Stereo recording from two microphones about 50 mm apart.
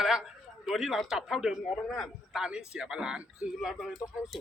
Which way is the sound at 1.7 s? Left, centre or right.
Centre.